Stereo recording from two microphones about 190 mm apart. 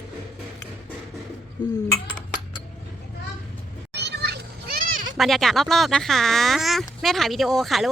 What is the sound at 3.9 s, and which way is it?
Children playing, 60° right (ahead or behind).